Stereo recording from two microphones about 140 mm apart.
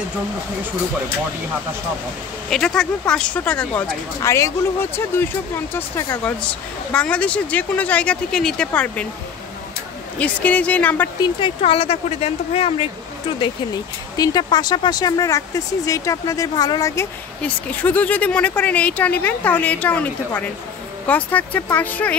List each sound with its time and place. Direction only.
2.5 s speech: 5° left (ahead or behind)
4.2 s speech: 20° left (ahead or behind)
10.1 s speech: 10° left (ahead or behind)
11.1 s speech: 35° left (ahead or behind)
14.1 s speech: 30° left (ahead or behind)
17.4 s speech: 10° left (ahead or behind)